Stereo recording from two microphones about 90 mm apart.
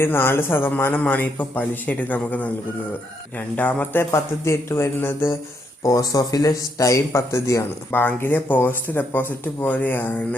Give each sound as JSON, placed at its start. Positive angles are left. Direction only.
{"t": 0.0, "sound": "a man's voice", "side_deg": 25}
{"t": 5.8, "sound": "a man's voice", "side_deg": 40}